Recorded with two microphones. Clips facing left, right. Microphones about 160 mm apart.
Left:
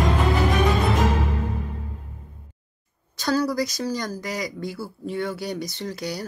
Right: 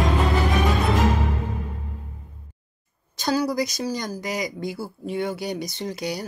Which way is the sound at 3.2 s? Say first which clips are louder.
Even; 15° right (ahead or behind).